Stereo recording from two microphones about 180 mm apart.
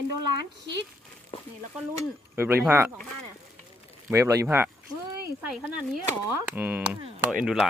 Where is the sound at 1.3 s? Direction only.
30° left (ahead or behind).